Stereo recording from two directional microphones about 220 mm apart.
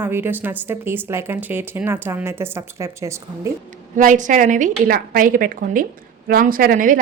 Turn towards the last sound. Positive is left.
turn(degrees=-40)  # may be behind; listen again after turning